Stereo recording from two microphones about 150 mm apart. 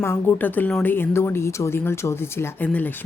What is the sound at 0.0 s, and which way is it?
Speech, 15° left (ahead or behind).